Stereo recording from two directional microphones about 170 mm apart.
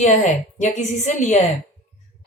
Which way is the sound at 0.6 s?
45° left (ahead or behind).